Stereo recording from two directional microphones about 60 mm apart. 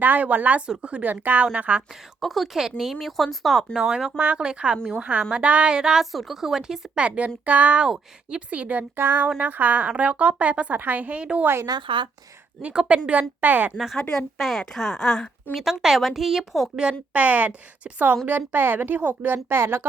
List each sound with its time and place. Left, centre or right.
0.0 s a woman's voice: right
2.2 s speech: centre
3.8 s a woman's voice: centre
9.0 s a woman's voice: right
11.7 s speech: right
12.6 s a woman's voice: centre
13.7 s speech: centre
14.0 s speech: centre
14.3 s speech: centre
15.5 s speech: centre
17.2 s a woman's voice: right